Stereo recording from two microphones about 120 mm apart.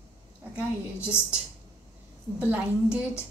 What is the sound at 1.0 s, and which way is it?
Speech, 20° left (ahead or behind).